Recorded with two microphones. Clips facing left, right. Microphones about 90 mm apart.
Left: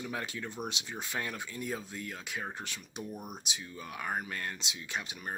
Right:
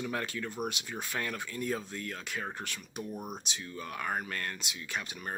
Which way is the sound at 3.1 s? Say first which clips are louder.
Right 3 dB; 30° right (ahead or behind).